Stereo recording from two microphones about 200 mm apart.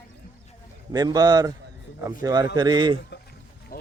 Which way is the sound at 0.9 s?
20° right (ahead or behind).